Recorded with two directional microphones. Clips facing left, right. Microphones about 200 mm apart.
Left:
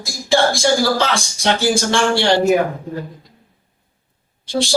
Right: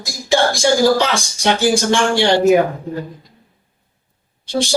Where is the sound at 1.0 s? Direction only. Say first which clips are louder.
Right 1 dB; 15° right (ahead or behind).